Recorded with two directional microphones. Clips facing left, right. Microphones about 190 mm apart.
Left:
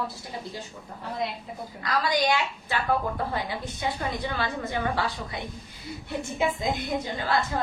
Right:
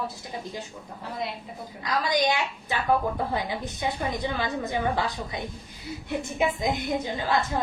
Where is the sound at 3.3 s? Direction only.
15° right (ahead or behind).